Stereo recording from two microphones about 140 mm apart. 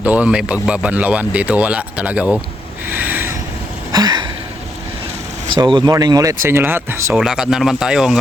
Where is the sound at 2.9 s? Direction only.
15° right (ahead or behind).